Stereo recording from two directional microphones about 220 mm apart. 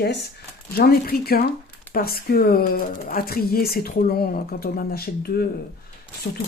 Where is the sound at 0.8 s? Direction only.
45° left (ahead or behind).